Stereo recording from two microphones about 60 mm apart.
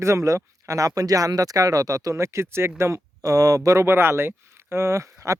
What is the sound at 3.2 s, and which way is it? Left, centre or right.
Speech, right.